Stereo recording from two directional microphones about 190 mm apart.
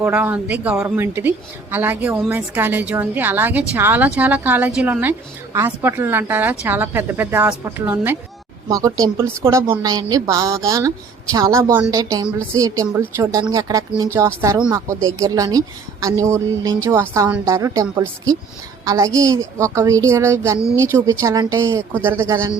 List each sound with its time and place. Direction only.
0.0 s a woman's voice: 10° right (ahead or behind)